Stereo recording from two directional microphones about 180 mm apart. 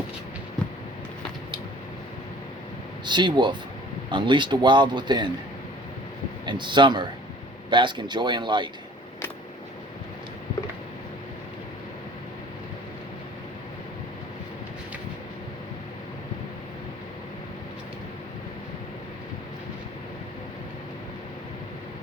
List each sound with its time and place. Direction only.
3.1 s a man's voice: 25° right (ahead or behind)
6.4 s a man's voice: 25° right (ahead or behind)